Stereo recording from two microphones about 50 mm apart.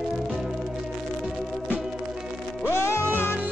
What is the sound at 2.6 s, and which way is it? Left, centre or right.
Music, left.